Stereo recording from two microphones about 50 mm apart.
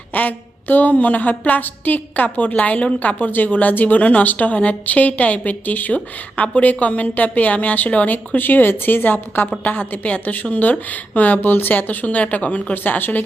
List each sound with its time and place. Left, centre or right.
0.1 s a woman's voice: left
12.7 s a woman's voice: left